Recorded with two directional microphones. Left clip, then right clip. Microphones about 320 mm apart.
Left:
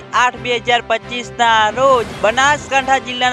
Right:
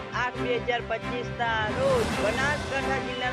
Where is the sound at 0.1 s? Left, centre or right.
Left.